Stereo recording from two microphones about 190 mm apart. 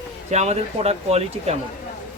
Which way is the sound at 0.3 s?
35° right (ahead or behind).